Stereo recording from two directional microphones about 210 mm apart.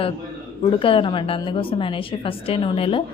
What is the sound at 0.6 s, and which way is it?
A woman's voice, 25° left (ahead or behind).